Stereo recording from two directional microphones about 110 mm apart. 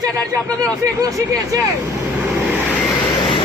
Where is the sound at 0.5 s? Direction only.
30° right (ahead or behind).